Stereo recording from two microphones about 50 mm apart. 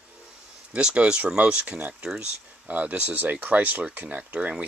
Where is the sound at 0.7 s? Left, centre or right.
Centre.